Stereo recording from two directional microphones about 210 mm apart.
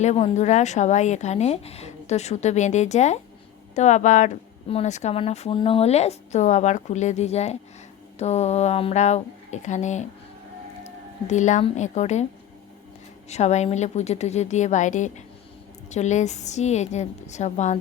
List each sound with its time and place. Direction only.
0.0 s a woman's voice: 35° left (ahead or behind)
11.3 s a woman's voice: 35° left (ahead or behind)
13.2 s a woman's voice: 30° left (ahead or behind)